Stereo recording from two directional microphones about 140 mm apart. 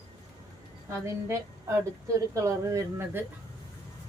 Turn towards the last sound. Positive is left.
turn(degrees=-15)  # may be behind; listen again after turning